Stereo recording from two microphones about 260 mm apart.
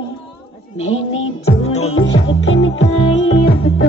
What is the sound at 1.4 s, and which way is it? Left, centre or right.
Music, left.